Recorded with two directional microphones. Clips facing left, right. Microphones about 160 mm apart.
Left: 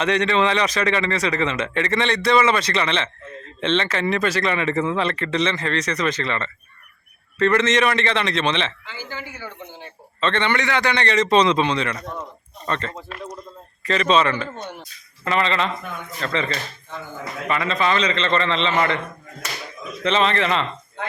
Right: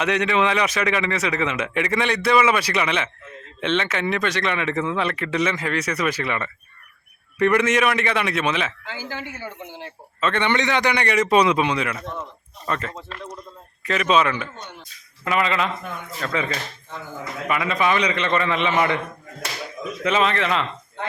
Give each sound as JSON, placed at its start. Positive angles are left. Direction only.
{"t": 0.0, "sound": "a man's voice", "side_deg": -5}
{"t": 9.0, "sound": "a man's voice", "side_deg": -80}
{"t": 10.2, "sound": "a man's voice", "side_deg": -10}
{"t": 12.0, "sound": "speech", "side_deg": 15}
{"t": 12.6, "sound": "a man's voice", "side_deg": -5}
{"t": 20.1, "sound": "a man's voice", "side_deg": -5}